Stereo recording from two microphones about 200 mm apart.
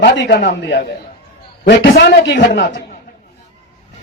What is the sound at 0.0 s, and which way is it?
Speech, 50° left (ahead or behind).